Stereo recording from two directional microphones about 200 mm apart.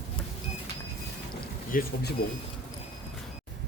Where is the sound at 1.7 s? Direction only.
45° left (ahead or behind).